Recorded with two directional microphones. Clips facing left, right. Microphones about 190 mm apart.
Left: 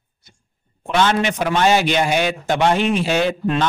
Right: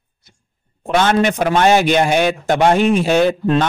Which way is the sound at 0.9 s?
50° right (ahead or behind).